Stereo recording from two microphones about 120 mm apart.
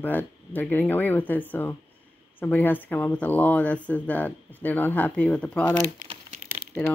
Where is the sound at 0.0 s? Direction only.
15° left (ahead or behind).